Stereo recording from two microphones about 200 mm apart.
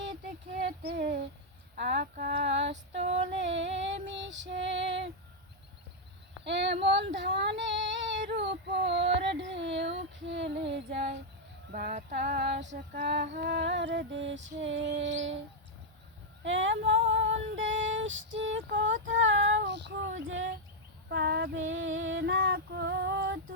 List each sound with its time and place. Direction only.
0.6 s a sound: 50° right (ahead or behind)
1.7 s female singing: 40° right (ahead or behind); by 3.0 s 65° right (ahead or behind)
3.4 s a sound: 65° right (ahead or behind)
4.0 s female singing: 65° right (ahead or behind)
6.4 s a sound: 60° right (ahead or behind)
6.8 s child singing: 60° right (ahead or behind)
11.7 s female singing: 45° right (ahead or behind); by 15.4 s 65° right (ahead or behind)
16.4 s female singing: 70° right (ahead or behind)
19.0 s child singing: 70° right (ahead or behind)
21.1 s child singing: 55° right (ahead or behind)
21.5 s female singing: 80° right; by 23.4 s 60° right (ahead or behind)